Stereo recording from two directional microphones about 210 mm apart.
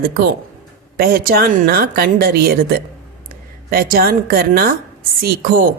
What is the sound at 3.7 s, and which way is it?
A woman's voice, 45° right (ahead or behind).